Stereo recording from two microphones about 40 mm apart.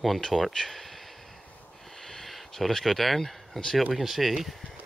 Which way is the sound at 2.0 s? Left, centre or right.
Centre.